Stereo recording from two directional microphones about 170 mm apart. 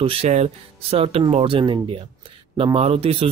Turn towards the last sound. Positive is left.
turn(degrees=-35)  # may be behind; listen again after turning